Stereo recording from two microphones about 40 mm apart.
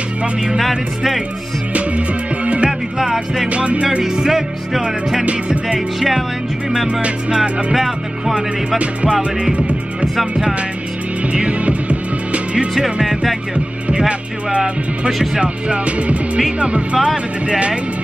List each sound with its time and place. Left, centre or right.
0.6 s music: centre
1.7 s music: right
3.0 s music: centre
3.4 s music: right
4.0 s music: centre
5.9 s music: centre
6.9 s music: right
7.7 s music: centre
8.7 s music: right
11.3 s music: right
13.0 s music: centre
13.8 s music: right
14.6 s music: centre
15.4 s music: right